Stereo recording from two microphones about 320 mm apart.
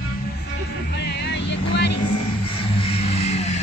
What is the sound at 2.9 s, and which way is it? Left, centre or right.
Vehicle, centre.